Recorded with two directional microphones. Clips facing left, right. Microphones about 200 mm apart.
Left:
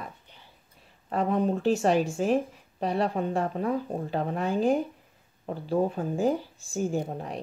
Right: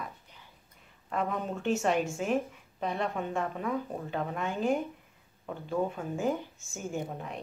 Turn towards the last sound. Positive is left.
turn(degrees=35)  # may be behind; listen again after turning